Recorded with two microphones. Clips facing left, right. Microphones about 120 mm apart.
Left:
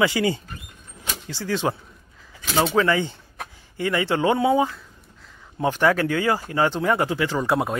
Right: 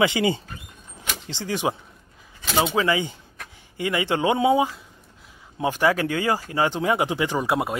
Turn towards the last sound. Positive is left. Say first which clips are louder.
# left 1 dB
turn(degrees=0)  # may be behind; listen again after turning